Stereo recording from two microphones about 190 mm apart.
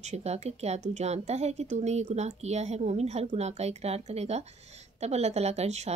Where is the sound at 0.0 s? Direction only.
35° right (ahead or behind).